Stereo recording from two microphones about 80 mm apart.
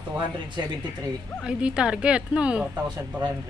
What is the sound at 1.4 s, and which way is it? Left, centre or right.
Speech, centre.